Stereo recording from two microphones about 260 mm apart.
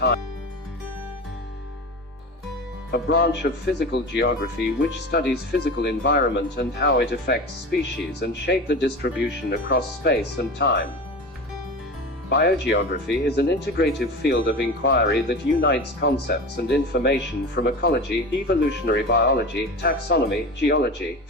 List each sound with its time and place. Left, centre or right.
2.9 s speech: left
12.3 s speech: left